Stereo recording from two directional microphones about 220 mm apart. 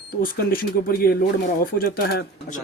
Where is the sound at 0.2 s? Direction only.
40° left (ahead or behind).